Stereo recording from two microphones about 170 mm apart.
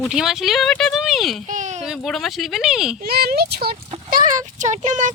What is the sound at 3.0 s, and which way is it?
Speech, 65° right (ahead or behind).